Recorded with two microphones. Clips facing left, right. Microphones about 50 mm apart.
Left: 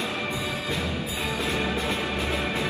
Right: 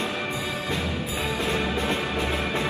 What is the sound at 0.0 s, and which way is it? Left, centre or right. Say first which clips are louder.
Music: right 1 dB; right.